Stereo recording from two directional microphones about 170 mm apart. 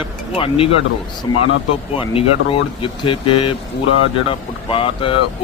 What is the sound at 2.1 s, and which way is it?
Speech, 30° left (ahead or behind).